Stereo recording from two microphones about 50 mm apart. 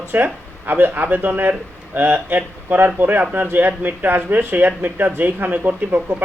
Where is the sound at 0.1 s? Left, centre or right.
Right.